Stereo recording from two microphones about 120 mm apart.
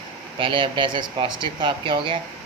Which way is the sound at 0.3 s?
45° right (ahead or behind).